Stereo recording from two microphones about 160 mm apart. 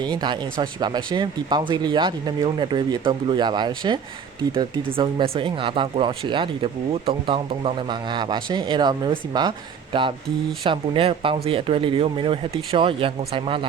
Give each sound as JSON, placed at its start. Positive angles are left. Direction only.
{"t": 0.0, "sound": "speech", "side_deg": -25}